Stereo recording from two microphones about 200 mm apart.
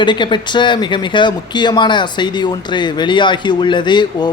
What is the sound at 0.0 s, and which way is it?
Speech, 25° left (ahead or behind).